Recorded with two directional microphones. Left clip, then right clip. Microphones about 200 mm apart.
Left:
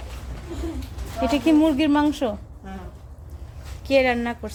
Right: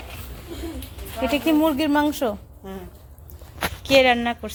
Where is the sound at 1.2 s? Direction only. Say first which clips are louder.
Left 1 dB; 15° right (ahead or behind).